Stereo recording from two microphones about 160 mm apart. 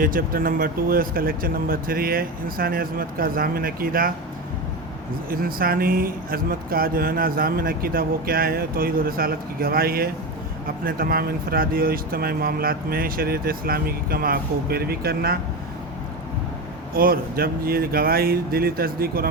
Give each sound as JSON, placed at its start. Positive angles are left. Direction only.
{"t": 0.0, "sound": "speech", "side_deg": -65}
{"t": 5.3, "sound": "speech", "side_deg": -65}
{"t": 16.9, "sound": "speech", "side_deg": -65}